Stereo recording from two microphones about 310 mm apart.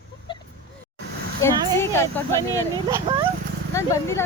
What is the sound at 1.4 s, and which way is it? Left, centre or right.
Speech, centre.